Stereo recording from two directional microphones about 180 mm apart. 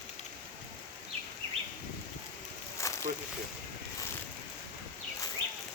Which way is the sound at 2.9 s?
20° left (ahead or behind).